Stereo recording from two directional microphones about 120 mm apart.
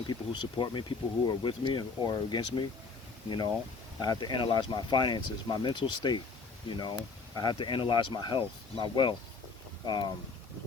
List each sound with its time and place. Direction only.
0.6 s speech: 40° left (ahead or behind)